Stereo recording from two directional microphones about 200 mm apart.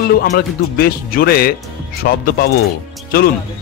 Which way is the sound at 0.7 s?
50° left (ahead or behind).